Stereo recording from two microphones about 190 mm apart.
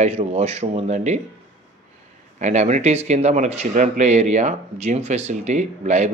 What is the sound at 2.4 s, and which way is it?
Speech, 35° right (ahead or behind).